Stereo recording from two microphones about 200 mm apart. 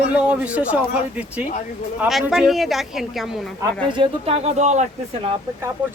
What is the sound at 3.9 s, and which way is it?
Speech, 30° right (ahead or behind).